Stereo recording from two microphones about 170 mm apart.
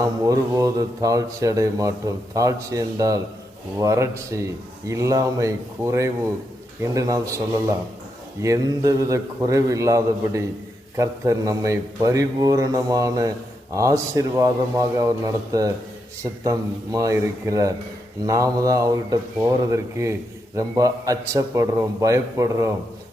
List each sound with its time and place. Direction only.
0.0 s speech: 20° right (ahead or behind)
8.4 s speech: 20° right (ahead or behind)